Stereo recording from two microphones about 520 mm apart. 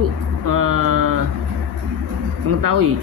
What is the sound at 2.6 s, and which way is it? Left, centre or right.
Speech, right.